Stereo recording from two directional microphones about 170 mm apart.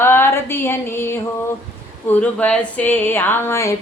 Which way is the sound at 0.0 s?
15° left (ahead or behind).